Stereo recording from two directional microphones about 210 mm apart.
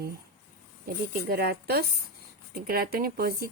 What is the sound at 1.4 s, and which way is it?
Speech, 50° right (ahead or behind).